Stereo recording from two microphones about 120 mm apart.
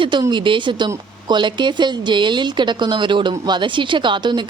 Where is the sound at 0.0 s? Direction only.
40° right (ahead or behind).